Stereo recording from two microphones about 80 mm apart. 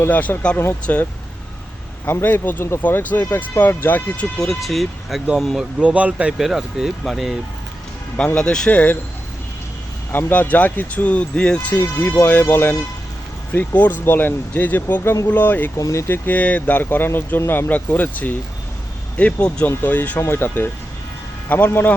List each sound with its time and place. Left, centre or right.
0.0 s speech: left
2.0 s speech: left
4.4 s speech: centre
5.8 s speech: centre
6.3 s speech: centre
8.1 s speech: centre
10.1 s speech: left
11.7 s speech: left
15.8 s speech: left
16.0 s speech: left